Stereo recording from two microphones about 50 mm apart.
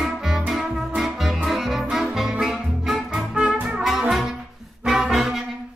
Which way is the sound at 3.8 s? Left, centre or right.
Centre.